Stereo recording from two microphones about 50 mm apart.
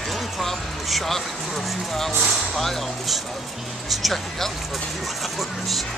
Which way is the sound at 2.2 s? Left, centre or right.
Centre.